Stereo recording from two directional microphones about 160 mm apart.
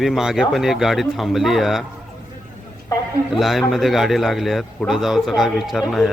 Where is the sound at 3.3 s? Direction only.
Centre (ahead or behind).